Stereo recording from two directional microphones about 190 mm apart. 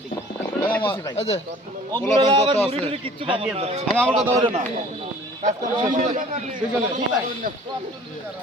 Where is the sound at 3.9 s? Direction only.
5° left (ahead or behind).